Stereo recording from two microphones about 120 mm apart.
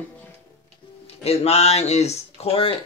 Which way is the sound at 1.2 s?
60° left (ahead or behind).